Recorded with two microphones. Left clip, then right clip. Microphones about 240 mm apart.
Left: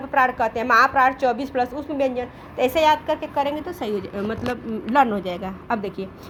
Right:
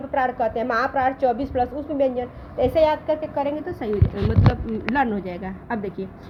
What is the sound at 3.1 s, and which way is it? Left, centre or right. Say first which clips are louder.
Speech: left 1 dB; left.